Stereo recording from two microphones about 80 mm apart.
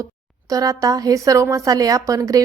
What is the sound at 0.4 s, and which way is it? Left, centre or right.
A woman's voice, right.